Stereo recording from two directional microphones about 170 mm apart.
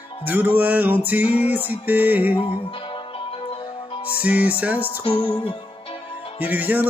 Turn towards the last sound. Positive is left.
turn(degrees=-10)  # may be behind; listen again after turning